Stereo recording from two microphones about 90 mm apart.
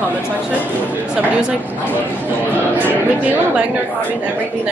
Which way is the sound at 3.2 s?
15° right (ahead or behind).